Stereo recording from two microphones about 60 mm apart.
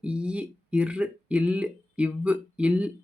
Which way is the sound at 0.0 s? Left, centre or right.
Centre.